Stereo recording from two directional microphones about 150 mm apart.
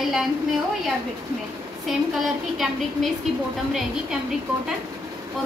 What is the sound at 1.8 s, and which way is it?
A woman's voice, centre (ahead or behind).